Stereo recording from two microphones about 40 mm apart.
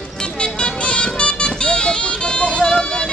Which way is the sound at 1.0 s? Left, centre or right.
Left.